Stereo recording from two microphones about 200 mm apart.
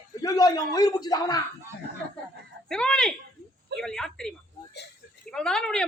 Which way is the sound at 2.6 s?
5° left (ahead or behind).